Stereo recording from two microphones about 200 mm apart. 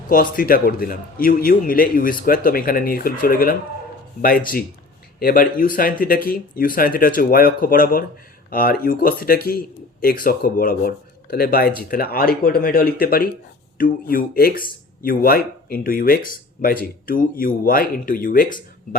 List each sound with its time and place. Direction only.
0.1 s speech: 45° left (ahead or behind)
5.2 s speech: 45° left (ahead or behind)